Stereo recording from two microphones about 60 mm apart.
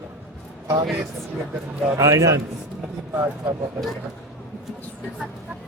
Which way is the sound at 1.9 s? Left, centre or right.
Right.